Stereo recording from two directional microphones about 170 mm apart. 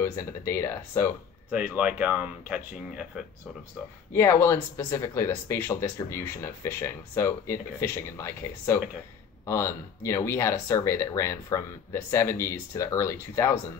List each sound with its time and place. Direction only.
0.0 s speech: 15° left (ahead or behind)
1.5 s speech: 10° right (ahead or behind)
4.1 s speech: 15° left (ahead or behind)